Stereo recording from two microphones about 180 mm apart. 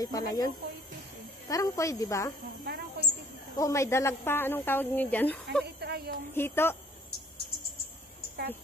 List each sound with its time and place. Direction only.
0.0 s speech: 20° left (ahead or behind)
1.5 s a woman's voice: 20° left (ahead or behind)
2.6 s a sound: 65° right (ahead or behind)
3.5 s a woman's voice: 15° left (ahead or behind)
5.8 s a sound: 60° right (ahead or behind)
6.3 s a woman's voice: 15° left (ahead or behind)